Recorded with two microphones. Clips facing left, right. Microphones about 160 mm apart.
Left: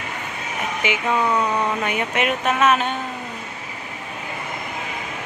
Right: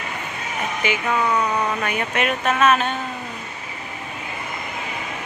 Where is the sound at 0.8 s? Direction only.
20° left (ahead or behind).